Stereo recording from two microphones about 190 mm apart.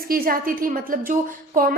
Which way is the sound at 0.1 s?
50° right (ahead or behind).